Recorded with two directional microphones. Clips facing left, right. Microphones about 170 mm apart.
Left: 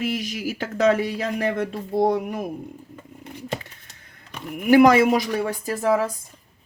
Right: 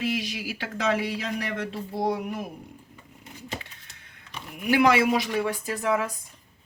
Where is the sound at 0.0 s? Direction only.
45° left (ahead or behind).